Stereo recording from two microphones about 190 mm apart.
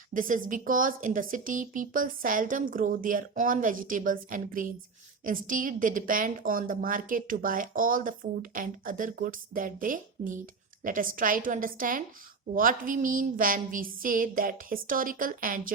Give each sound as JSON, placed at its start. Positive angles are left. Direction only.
{"t": 0.1, "sound": "a woman's voice", "side_deg": -45}